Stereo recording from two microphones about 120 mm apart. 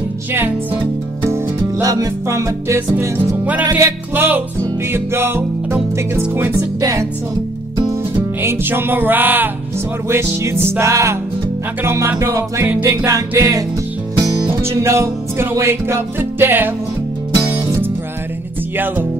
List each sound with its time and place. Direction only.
1.3 s music: 30° right (ahead or behind)
6.8 s music: 30° right (ahead or behind)
8.4 s music: 20° right (ahead or behind)